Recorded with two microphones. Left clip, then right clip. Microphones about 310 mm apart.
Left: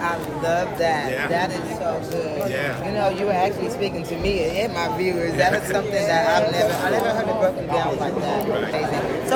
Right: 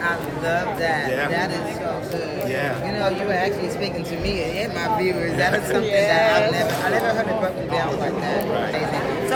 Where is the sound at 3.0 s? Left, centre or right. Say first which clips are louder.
Left 2 dB; centre.